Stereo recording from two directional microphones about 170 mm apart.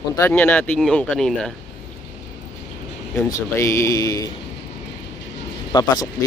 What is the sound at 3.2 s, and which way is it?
Speech, 20° left (ahead or behind).